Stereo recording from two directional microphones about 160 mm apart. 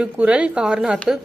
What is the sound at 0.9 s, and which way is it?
Speech, 5° left (ahead or behind).